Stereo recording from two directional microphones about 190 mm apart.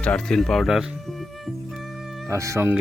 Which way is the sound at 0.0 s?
5° left (ahead or behind).